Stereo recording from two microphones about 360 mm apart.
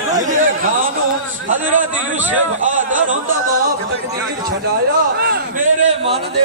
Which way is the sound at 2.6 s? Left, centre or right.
Right.